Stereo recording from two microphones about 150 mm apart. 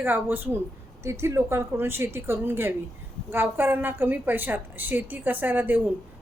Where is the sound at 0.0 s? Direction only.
15° right (ahead or behind).